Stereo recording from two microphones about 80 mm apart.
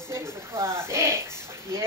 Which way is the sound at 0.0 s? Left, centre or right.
Right.